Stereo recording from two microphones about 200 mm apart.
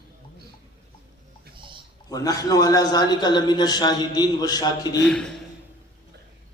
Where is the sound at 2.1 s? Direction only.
15° left (ahead or behind).